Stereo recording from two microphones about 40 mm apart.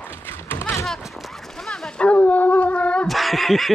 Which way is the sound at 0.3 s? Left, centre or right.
Left.